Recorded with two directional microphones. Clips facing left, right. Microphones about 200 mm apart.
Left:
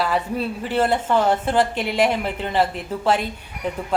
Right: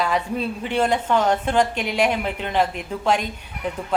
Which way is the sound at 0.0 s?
5° left (ahead or behind).